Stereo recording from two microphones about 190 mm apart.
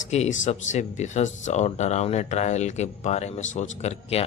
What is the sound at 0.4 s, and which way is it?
Speech, 40° left (ahead or behind).